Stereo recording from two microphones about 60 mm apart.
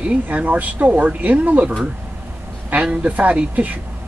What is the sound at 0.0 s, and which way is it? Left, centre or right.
Speech, centre.